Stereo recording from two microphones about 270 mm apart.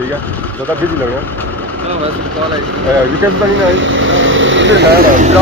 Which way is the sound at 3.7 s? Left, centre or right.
Right.